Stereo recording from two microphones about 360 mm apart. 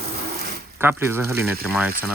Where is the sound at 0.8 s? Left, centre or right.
Centre.